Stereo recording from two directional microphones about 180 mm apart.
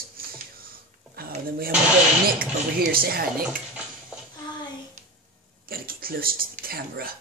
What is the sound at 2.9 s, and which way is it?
Speech, 55° right (ahead or behind).